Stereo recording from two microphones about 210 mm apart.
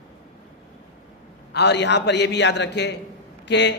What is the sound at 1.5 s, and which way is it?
A man's voice, 55° left (ahead or behind).